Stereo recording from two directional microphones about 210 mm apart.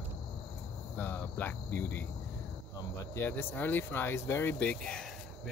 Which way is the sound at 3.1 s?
10° left (ahead or behind).